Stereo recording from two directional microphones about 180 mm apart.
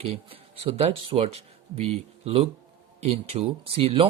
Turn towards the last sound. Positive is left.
turn(degrees=-30)  # may be behind; listen again after turning